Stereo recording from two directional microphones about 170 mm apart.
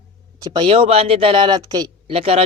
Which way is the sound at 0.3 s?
25° right (ahead or behind).